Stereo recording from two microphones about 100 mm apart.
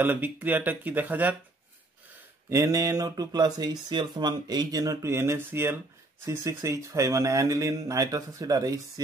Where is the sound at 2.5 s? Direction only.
35° right (ahead or behind).